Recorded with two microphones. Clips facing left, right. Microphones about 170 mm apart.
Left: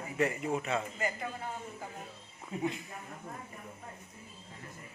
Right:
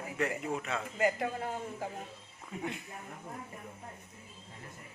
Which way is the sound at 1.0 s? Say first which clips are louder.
Right 6 dB; 80° right.